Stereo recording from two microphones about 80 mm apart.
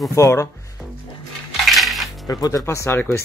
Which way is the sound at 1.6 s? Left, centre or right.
Centre.